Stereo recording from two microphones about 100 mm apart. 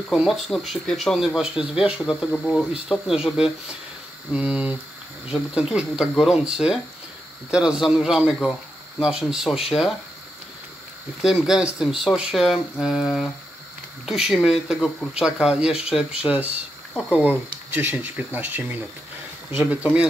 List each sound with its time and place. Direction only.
0.1 s speech: centre (ahead or behind)
2.3 s speech: 10° left (ahead or behind)
2.7 s speech: 5° right (ahead or behind)
11.2 s speech: 5° right (ahead or behind)